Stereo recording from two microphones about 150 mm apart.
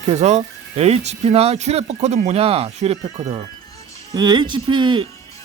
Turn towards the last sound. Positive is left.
turn(degrees=-30)  # may be behind; listen again after turning